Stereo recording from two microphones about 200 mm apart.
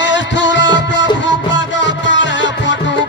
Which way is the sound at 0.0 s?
65° left (ahead or behind).